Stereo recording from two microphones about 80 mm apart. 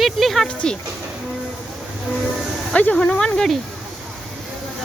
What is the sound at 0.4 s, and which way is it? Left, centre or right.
Speech, centre.